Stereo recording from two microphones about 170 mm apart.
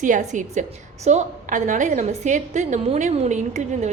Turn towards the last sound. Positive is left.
turn(degrees=-45)  # may be behind; listen again after turning